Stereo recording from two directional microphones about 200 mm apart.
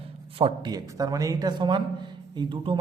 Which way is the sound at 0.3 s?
25° right (ahead or behind).